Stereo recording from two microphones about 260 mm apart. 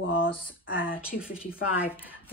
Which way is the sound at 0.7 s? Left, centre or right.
Left.